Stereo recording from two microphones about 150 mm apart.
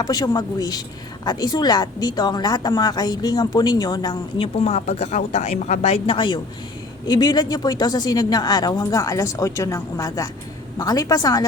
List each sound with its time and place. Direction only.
0.0 s speech: 25° left (ahead or behind)
4.6 s speech: 45° left (ahead or behind); by 11.4 s 25° left (ahead or behind)